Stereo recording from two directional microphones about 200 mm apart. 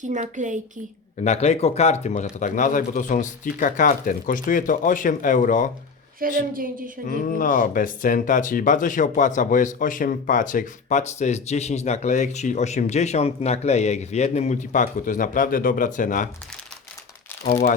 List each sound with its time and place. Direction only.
0.0 s a woman's voice: 40° right (ahead or behind)
1.2 s speech: 35° left (ahead or behind)
6.1 s a woman's voice: 45° right (ahead or behind)
7.1 s speech: 40° left (ahead or behind)
17.4 s speech: 35° left (ahead or behind)